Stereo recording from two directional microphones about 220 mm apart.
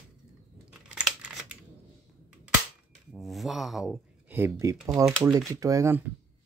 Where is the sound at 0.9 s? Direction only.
5° right (ahead or behind).